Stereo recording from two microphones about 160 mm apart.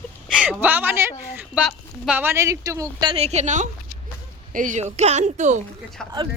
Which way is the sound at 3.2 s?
45° right (ahead or behind).